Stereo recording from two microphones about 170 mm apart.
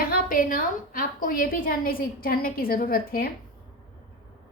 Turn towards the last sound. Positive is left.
turn(degrees=60)  # may be behind; listen again after turning